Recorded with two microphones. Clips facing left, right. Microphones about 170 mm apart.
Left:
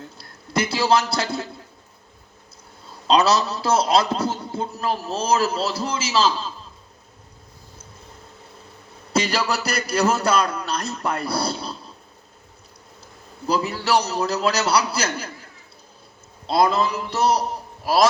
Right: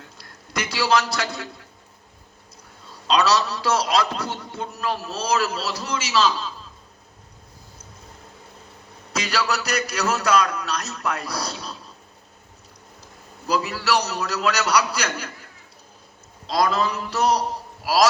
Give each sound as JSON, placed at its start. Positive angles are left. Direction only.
{"t": 0.2, "sound": "a man's voice", "side_deg": 30}
{"t": 3.1, "sound": "a man's voice", "side_deg": 30}
{"t": 9.1, "sound": "a man's voice", "side_deg": 30}
{"t": 13.5, "sound": "a man's voice", "side_deg": 30}
{"t": 16.5, "sound": "a man's voice", "side_deg": 30}